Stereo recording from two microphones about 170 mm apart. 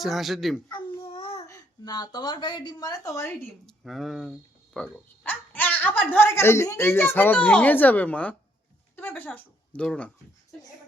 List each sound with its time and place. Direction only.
0.0 s speech: centre (ahead or behind)
0.7 s child singing: 25° left (ahead or behind)
1.5 s a woman's voice: 20° left (ahead or behind)
3.7 s speech: centre (ahead or behind)